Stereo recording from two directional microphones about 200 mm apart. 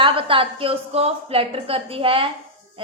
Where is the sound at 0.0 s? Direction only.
25° right (ahead or behind).